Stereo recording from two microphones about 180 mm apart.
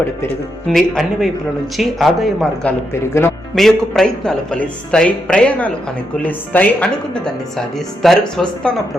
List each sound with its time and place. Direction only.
0.7 s speech: centre (ahead or behind)
2.9 s speech: 15° left (ahead or behind)
3.5 s speech: centre (ahead or behind)